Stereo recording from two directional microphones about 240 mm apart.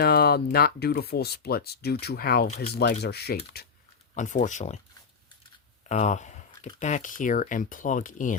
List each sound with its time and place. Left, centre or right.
0.0 s speech: left
5.9 s speech: left